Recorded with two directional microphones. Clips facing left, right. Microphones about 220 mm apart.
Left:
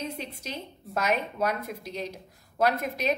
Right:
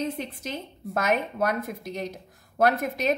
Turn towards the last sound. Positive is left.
turn(degrees=-50)  # may be behind; listen again after turning